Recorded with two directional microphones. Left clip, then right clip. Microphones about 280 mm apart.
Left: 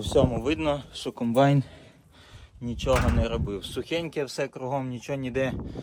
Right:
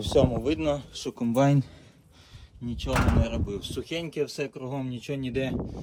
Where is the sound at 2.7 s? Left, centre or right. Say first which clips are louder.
Left 3 dB; centre.